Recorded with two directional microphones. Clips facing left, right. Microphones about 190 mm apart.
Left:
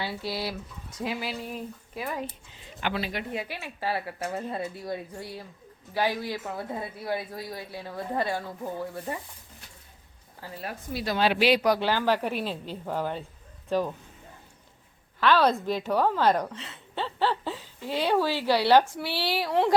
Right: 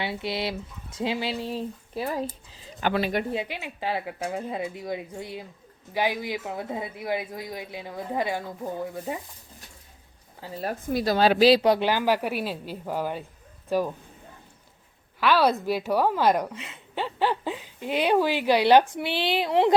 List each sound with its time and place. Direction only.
0.0 s speech: 20° right (ahead or behind)
2.8 s speech: 50° right (ahead or behind)
3.3 s a woman's voice: 20° right (ahead or behind)
10.6 s a woman's voice: 40° right (ahead or behind); by 11.9 s 25° right (ahead or behind)
11.9 s a woman's voice: 10° right (ahead or behind)
15.2 s a woman's voice: 10° right (ahead or behind)